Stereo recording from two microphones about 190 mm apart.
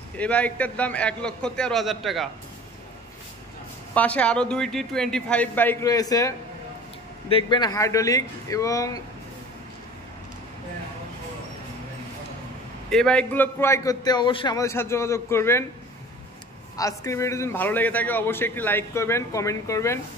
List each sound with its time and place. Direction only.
0.2 s a man's voice: 5° left (ahead or behind)
3.9 s a man's voice: 10° left (ahead or behind)
12.9 s a man's voice: 5° left (ahead or behind)
16.7 s a man's voice: 15° left (ahead or behind)